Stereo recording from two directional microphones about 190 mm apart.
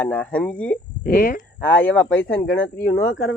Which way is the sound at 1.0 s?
50° left (ahead or behind).